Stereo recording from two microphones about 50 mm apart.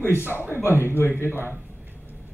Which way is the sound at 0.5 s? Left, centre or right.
Left.